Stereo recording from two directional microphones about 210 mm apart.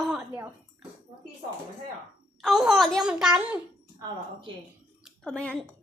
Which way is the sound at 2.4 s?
Centre (ahead or behind).